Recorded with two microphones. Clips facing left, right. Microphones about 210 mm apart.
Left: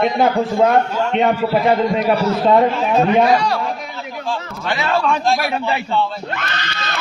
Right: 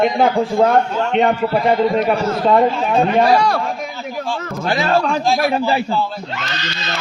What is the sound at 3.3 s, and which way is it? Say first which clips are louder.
Speech: right 1 dB; 45° right (ahead or behind).